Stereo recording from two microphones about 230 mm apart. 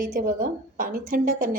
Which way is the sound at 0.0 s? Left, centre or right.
Right.